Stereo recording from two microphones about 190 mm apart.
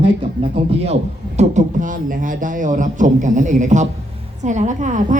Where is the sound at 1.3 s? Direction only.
40° right (ahead or behind).